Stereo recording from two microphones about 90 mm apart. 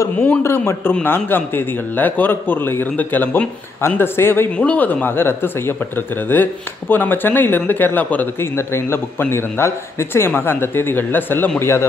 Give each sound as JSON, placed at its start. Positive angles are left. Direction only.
{"t": 0.2, "sound": "speech", "side_deg": 25}